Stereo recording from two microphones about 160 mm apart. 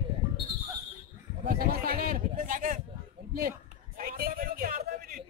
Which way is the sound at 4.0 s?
65° right (ahead or behind).